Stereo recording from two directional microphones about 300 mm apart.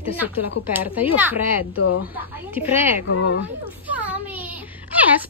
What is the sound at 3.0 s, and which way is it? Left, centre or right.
Speech, left.